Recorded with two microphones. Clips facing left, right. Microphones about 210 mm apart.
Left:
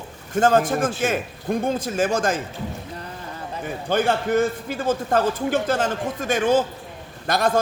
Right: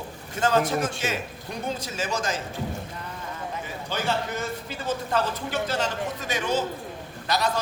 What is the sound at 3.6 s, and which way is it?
A man's voice, 55° left (ahead or behind).